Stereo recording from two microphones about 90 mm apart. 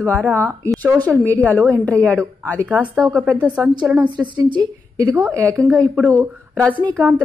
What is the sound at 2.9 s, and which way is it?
Speech, centre (ahead or behind).